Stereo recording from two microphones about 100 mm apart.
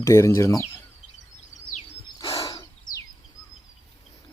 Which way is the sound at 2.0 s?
35° left (ahead or behind).